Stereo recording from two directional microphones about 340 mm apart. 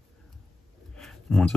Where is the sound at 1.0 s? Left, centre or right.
Centre.